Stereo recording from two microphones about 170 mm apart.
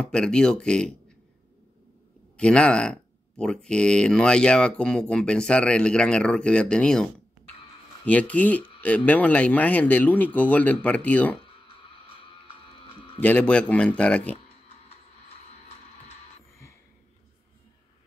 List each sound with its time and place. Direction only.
0.0 s speech: 5° left (ahead or behind)
2.3 s speech: 5° left (ahead or behind)
12.8 s sheep: 30° left (ahead or behind)
13.2 s speech: 10° left (ahead or behind)